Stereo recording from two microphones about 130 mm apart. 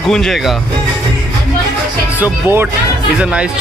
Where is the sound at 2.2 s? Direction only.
15° right (ahead or behind).